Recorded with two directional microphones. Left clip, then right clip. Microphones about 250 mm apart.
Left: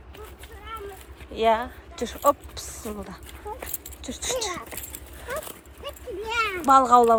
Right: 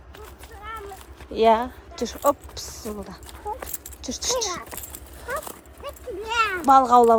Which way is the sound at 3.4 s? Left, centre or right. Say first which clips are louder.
Right 5 dB; right.